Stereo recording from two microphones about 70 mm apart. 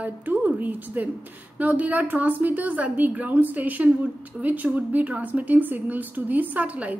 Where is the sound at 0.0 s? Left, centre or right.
Right.